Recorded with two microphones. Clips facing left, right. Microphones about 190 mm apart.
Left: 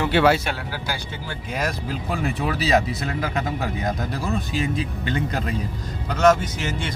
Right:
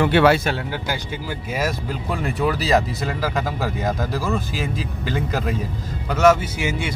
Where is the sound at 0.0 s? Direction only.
60° right (ahead or behind).